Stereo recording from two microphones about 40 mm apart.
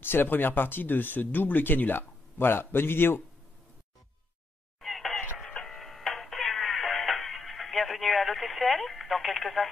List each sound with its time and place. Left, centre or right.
0.0 s speech: left
4.7 s a sound: centre
5.6 s music: centre